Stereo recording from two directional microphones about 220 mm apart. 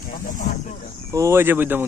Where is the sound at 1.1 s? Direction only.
10° right (ahead or behind).